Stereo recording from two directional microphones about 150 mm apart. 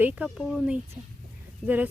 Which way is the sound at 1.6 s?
5° left (ahead or behind).